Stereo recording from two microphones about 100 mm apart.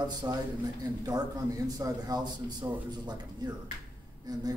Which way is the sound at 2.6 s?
30° right (ahead or behind).